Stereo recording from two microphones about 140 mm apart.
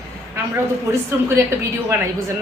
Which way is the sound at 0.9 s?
20° right (ahead or behind).